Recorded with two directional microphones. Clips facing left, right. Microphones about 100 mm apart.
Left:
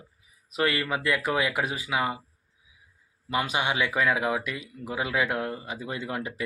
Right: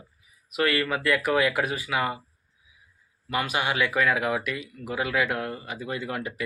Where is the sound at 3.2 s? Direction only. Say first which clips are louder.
Even; 20° left (ahead or behind).